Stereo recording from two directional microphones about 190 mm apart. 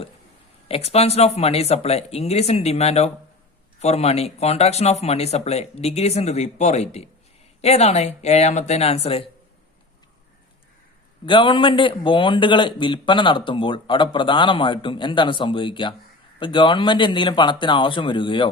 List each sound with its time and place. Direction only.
0.7 s speech: 35° left (ahead or behind)
11.3 s a man's voice: 25° left (ahead or behind)